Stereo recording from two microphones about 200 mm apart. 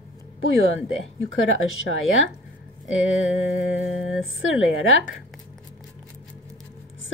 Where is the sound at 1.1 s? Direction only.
80° left.